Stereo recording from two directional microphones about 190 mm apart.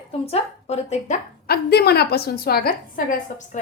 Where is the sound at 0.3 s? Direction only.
30° left (ahead or behind).